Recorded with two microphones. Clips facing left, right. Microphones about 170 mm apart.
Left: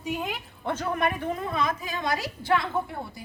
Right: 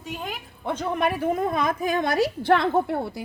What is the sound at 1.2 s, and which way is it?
A woman's voice, 45° right (ahead or behind).